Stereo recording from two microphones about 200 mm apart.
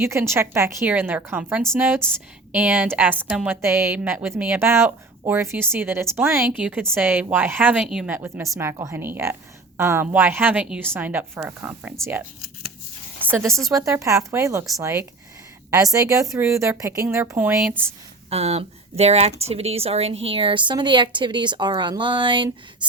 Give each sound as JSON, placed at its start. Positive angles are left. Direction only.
{"t": 0.0, "sound": "a woman's voice", "side_deg": -10}
{"t": 13.7, "sound": "a woman's voice", "side_deg": -15}
{"t": 18.3, "sound": "a woman's voice", "side_deg": -30}